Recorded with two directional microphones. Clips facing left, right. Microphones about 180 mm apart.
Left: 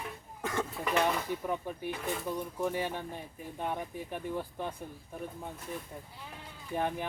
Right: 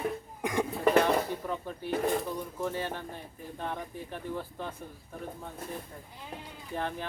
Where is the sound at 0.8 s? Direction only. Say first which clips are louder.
Right 6 dB; 50° right (ahead or behind).